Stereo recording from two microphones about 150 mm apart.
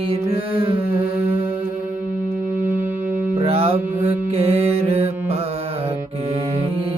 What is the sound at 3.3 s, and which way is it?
Mantra, 40° right (ahead or behind).